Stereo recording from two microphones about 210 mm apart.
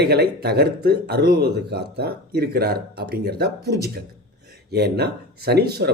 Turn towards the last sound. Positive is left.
turn(degrees=-50)  # may be behind; listen again after turning